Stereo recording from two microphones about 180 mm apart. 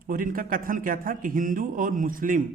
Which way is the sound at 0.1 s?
50° right (ahead or behind).